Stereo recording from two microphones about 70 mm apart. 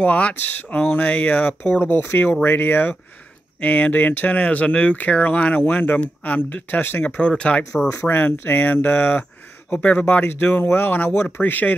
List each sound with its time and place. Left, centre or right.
0.0 s speech: centre
7.2 s speech: centre
8.1 s speech: left